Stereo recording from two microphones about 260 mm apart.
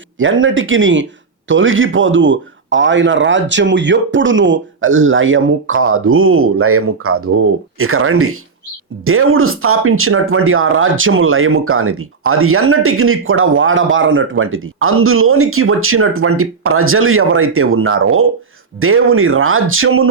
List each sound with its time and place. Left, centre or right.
0.2 s speech: right